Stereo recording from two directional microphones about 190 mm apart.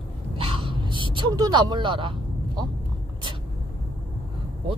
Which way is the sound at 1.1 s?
25° right (ahead or behind).